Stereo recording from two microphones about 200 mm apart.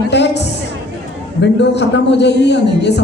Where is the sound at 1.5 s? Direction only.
60° left (ahead or behind).